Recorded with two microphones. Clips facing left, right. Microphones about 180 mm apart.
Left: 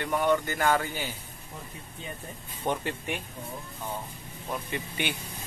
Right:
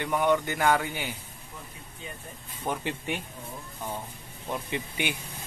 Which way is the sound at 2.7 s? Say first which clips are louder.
Left 2 dB; 5° right (ahead or behind).